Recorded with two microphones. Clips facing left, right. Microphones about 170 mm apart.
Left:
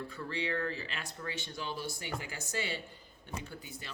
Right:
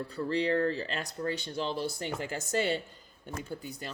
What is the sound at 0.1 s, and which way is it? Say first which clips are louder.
Speech: right 11 dB; 35° right (ahead or behind).